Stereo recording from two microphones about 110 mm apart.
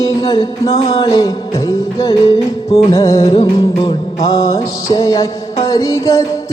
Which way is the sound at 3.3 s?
50° left (ahead or behind).